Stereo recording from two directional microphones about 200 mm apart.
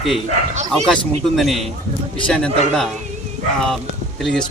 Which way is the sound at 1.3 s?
Centre (ahead or behind).